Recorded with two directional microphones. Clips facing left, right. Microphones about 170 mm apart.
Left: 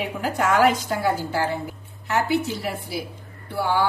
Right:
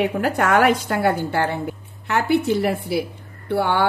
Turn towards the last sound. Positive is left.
turn(degrees=-65)  # may be behind; listen again after turning